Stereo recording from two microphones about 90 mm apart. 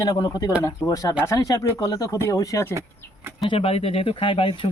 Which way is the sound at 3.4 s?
90° left.